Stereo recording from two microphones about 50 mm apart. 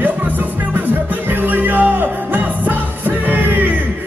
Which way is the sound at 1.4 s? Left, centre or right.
Right.